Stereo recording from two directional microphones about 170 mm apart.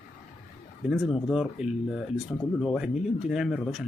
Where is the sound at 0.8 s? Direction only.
Centre (ahead or behind).